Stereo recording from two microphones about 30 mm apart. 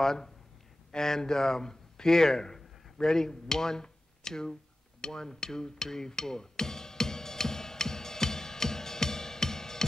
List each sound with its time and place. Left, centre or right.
0.0 s speech: centre
5.0 s music: left